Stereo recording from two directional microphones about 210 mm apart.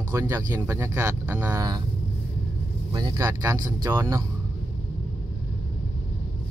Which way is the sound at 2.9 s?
15° right (ahead or behind).